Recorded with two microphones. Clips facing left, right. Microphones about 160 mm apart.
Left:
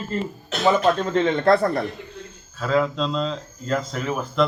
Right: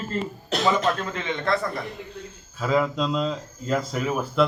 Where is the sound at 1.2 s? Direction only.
40° left (ahead or behind).